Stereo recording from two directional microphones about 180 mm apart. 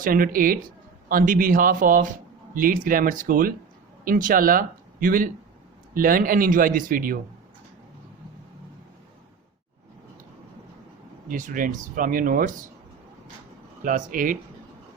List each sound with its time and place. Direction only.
0.0 s a man's voice: 50° right (ahead or behind)
11.3 s a man's voice: 45° right (ahead or behind)
13.8 s a man's voice: 50° right (ahead or behind)